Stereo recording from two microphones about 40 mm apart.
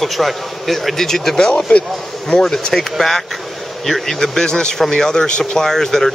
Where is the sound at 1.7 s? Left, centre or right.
Left.